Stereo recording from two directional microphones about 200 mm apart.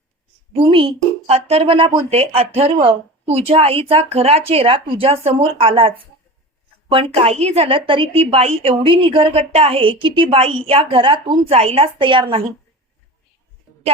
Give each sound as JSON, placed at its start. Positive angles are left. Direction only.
{"t": 0.5, "sound": "a woman's voice", "side_deg": -25}
{"t": 6.9, "sound": "a woman's voice", "side_deg": -30}